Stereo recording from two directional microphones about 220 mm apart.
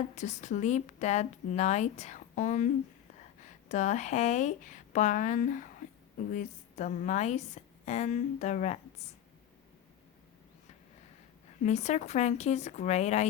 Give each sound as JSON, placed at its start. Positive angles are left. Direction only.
{"t": 0.2, "sound": "speech", "side_deg": 35}
{"t": 3.7, "sound": "speech", "side_deg": 35}
{"t": 11.6, "sound": "speech", "side_deg": 30}